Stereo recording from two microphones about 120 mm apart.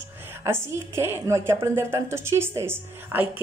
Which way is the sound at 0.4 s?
20° right (ahead or behind).